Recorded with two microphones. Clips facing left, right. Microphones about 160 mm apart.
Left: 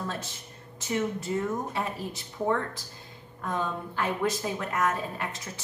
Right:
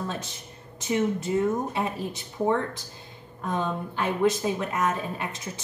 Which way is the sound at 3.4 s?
20° right (ahead or behind).